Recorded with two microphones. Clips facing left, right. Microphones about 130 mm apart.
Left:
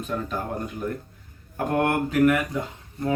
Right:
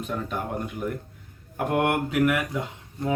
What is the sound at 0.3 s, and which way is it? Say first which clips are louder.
Speech: even; 15° right (ahead or behind).